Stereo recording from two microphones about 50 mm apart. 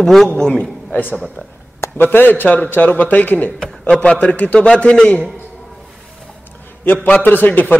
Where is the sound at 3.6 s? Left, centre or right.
Centre.